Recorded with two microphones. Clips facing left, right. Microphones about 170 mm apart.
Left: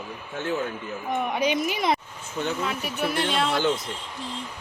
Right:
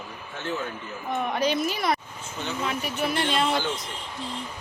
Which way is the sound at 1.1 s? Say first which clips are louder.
Left 1 dB; 10° left (ahead or behind).